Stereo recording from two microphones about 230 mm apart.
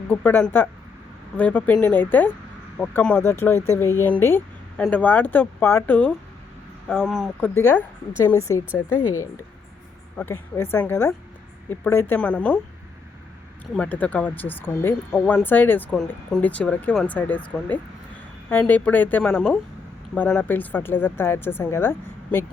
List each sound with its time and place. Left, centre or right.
0.1 s speech: centre
10.2 s speech: centre
13.7 s speech: centre